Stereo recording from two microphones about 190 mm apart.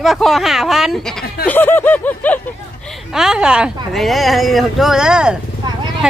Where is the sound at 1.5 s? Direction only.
10° left (ahead or behind).